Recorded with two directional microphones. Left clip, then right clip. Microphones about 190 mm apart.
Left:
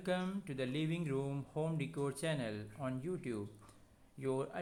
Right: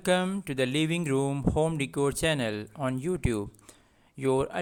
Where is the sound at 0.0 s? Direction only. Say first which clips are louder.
Right 12 dB; 40° right (ahead or behind).